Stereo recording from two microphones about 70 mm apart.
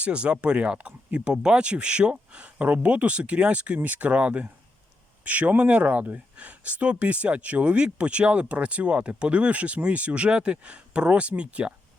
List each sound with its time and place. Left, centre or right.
0.0 s speech: centre